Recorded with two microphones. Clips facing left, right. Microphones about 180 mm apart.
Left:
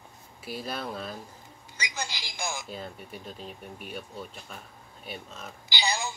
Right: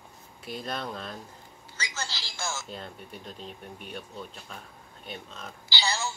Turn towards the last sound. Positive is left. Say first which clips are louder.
# even
turn(degrees=15)  # may be behind; listen again after turning